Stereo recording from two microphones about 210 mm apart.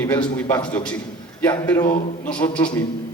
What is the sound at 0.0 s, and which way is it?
A man's voice, 10° left (ahead or behind).